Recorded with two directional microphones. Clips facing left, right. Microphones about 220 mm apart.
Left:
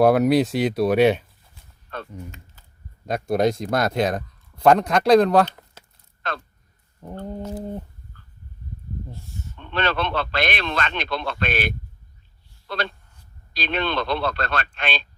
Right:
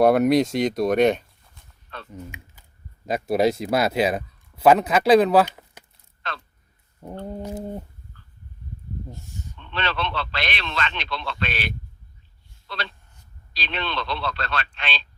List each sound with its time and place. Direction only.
0.0 s speech: centre (ahead or behind)
1.9 s typing: 50° left (ahead or behind)
3.1 s speech: 5° right (ahead or behind)
7.0 s a sound: 10° right (ahead or behind)
9.6 s a man's voice: 50° left (ahead or behind)